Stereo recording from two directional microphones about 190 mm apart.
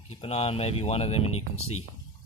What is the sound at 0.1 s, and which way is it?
Speech, 35° left (ahead or behind).